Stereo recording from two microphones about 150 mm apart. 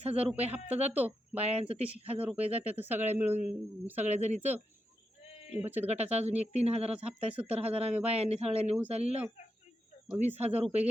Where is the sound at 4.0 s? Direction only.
50° right (ahead or behind).